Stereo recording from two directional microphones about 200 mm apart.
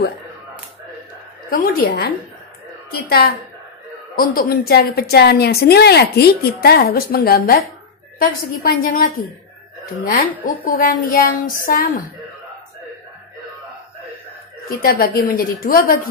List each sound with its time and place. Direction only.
1.5 s a woman's voice: 45° left (ahead or behind)
8.8 s a woman's voice: 45° left (ahead or behind)
14.8 s a woman's voice: 45° left (ahead or behind)